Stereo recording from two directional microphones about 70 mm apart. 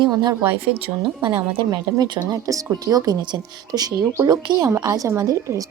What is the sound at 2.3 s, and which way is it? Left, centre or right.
A woman's voice, right.